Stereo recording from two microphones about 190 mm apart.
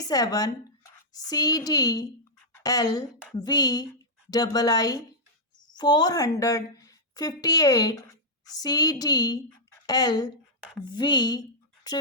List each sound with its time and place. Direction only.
0.0 s a woman's voice: 20° left (ahead or behind)